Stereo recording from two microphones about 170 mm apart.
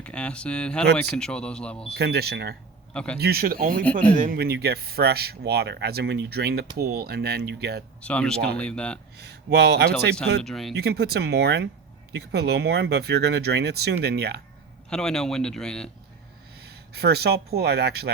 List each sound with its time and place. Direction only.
0.0 s a man's voice: 5° left (ahead or behind)
2.0 s speech: 70° right (ahead or behind)
2.9 s speech: 5° left (ahead or behind)
3.2 s speech: 65° right (ahead or behind)
8.0 s speech: 5° left (ahead or behind)
9.1 s speech: 75° right (ahead or behind)
10.4 s a man's voice: centre (ahead or behind)
10.8 s speech: 70° right (ahead or behind)
14.8 s a man's voice: 5° left (ahead or behind)
16.6 s speech: 70° right (ahead or behind)